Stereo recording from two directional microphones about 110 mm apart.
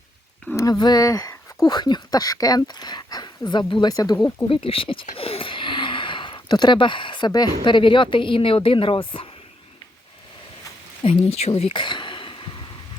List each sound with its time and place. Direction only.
0.5 s speech: 35° left (ahead or behind)
4.4 s speech: 55° left (ahead or behind)
11.0 s speech: 65° left (ahead or behind)
11.7 s a sound: 45° left (ahead or behind)